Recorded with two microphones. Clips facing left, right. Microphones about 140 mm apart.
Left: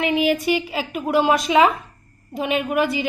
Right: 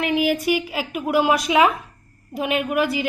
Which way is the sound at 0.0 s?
Centre (ahead or behind).